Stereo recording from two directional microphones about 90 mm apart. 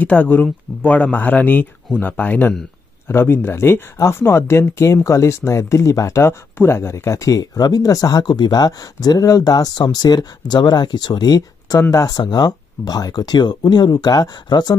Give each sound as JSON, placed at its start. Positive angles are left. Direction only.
{"t": 0.0, "sound": "speech", "side_deg": 15}